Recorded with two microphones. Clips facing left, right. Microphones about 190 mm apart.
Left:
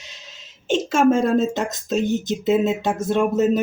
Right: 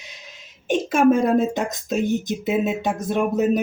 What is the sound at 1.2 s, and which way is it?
Speech, 15° right (ahead or behind).